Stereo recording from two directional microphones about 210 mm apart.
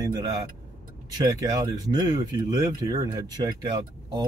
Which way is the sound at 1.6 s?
15° right (ahead or behind).